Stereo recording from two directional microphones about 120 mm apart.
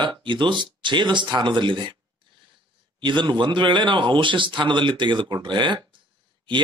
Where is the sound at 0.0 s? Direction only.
40° right (ahead or behind).